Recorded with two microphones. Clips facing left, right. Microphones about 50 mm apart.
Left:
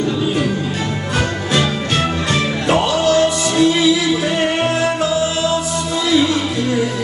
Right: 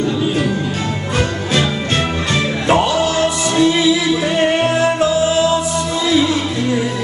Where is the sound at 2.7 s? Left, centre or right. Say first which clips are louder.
Even; centre.